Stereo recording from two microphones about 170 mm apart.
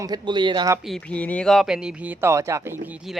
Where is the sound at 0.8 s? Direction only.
5° left (ahead or behind).